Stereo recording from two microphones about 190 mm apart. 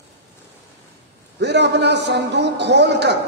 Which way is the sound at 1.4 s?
65° right (ahead or behind).